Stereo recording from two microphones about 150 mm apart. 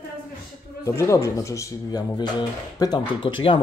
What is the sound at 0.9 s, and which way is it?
Speech, 20° left (ahead or behind).